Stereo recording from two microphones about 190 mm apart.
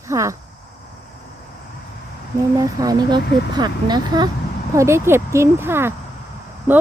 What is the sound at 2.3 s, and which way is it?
Speech, 15° right (ahead or behind).